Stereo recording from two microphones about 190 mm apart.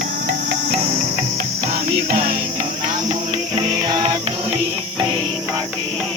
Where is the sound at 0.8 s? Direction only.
40° right (ahead or behind).